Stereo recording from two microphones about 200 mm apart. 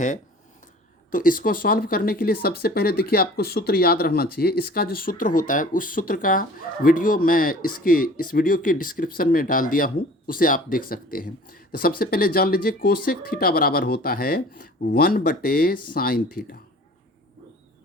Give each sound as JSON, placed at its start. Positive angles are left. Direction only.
{"t": 1.1, "sound": "speech", "side_deg": 45}